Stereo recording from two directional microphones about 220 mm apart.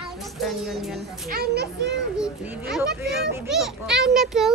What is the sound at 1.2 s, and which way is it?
Speech, 45° right (ahead or behind).